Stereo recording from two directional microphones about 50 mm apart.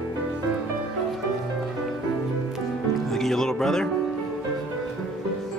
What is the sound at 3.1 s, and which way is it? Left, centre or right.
Music, centre.